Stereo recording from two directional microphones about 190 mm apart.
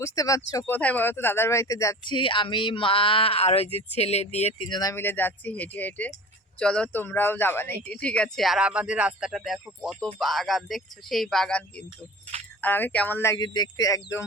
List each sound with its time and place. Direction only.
0.0 s speech: 15° left (ahead or behind)
12.6 s speech: 10° left (ahead or behind)